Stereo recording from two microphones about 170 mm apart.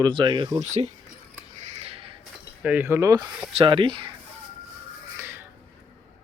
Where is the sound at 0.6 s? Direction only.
45° right (ahead or behind).